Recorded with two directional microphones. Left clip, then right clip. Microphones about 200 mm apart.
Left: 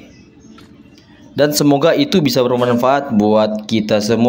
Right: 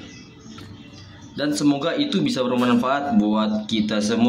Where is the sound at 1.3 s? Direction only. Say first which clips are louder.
Left 9 dB; 50° left (ahead or behind).